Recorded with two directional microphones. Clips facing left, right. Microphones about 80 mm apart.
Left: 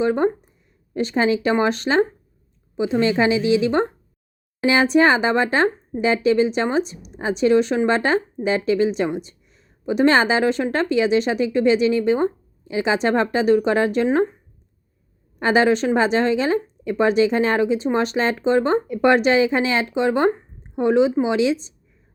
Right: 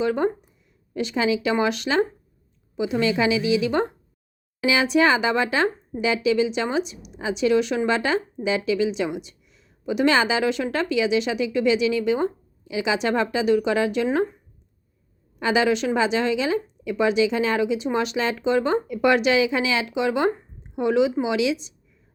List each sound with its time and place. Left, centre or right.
0.0 s speech: left
15.4 s speech: left